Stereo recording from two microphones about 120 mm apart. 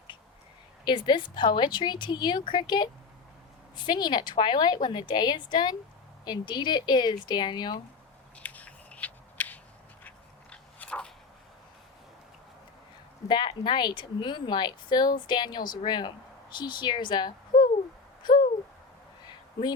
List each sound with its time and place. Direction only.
0.9 s speech: 40° left (ahead or behind)
8.4 s scissors: 10° left (ahead or behind)
10.5 s biting: 10° left (ahead or behind)
13.2 s speech: 40° left (ahead or behind)
18.2 s a sound: 40° left (ahead or behind)